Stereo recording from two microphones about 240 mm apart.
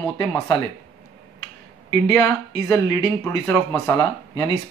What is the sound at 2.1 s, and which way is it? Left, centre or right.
Speech, centre.